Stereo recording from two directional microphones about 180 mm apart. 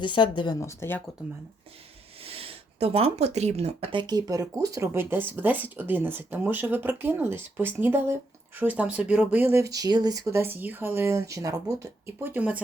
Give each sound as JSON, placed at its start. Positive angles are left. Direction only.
{"t": 0.0, "sound": "speech", "side_deg": 25}
{"t": 2.2, "sound": "speech", "side_deg": -30}